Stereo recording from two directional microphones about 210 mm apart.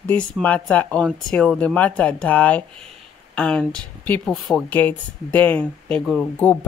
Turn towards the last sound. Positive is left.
turn(degrees=5)  # may be behind; listen again after turning